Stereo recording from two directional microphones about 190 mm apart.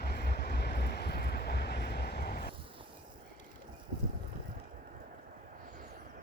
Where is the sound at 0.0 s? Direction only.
55° left (ahead or behind).